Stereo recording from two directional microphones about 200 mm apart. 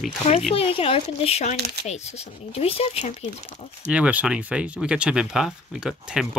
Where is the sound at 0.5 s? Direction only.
30° left (ahead or behind).